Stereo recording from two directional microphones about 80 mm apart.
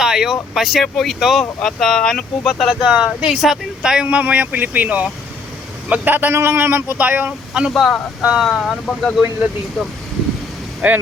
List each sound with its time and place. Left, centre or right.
0.0 s vehicle: centre
0.5 s speech: centre
2.9 s speech: centre
7.7 s speech: centre
10.8 s speech: right